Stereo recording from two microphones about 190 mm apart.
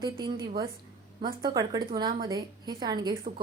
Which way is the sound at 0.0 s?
25° right (ahead or behind).